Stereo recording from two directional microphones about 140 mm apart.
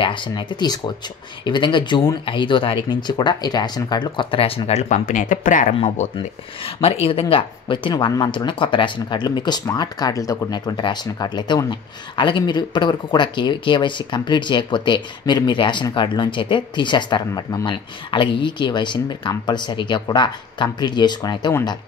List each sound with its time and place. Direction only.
0.0 s speech: 35° left (ahead or behind); by 5.8 s 65° left (ahead or behind)
5.8 s speech: 55° left (ahead or behind)
6.1 s speech: 40° left (ahead or behind)